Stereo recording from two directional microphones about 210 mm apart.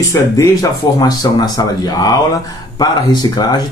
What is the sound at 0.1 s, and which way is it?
Speech, 15° left (ahead or behind).